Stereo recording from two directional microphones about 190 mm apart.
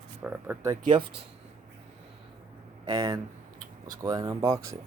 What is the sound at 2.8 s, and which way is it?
Speech, 20° right (ahead or behind).